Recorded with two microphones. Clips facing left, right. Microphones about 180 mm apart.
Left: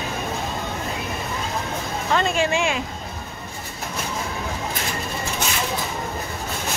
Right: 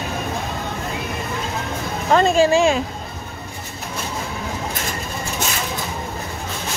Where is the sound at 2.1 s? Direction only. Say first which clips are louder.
Right 7 dB; 40° right (ahead or behind).